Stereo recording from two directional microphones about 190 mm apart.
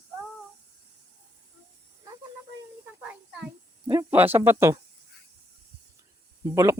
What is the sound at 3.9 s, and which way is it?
Speech, 15° right (ahead or behind).